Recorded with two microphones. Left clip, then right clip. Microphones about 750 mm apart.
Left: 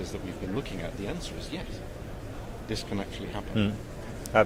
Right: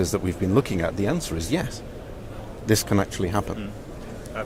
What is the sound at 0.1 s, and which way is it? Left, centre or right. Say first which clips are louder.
Speech: right 12 dB; right.